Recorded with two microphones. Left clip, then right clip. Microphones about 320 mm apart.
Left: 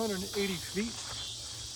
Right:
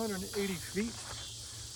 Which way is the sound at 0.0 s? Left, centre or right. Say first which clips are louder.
Left 3 dB; centre.